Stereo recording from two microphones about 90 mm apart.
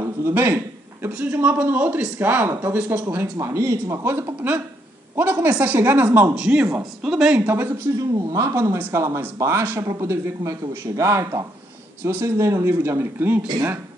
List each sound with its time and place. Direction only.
0.0 s a man's voice: 30° right (ahead or behind); by 7.4 s 10° right (ahead or behind)
7.4 s speech: 25° right (ahead or behind)
8.1 s speech: 40° right (ahead or behind)
8.7 s speech: 20° right (ahead or behind)